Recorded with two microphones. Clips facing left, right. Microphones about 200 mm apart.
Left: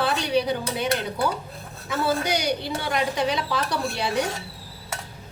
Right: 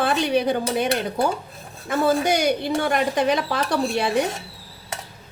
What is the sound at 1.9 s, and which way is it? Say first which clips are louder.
A woman's voice: right 5 dB; 50° right (ahead or behind).